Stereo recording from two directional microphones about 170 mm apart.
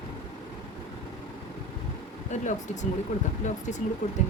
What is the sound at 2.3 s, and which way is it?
Speech, 45° left (ahead or behind).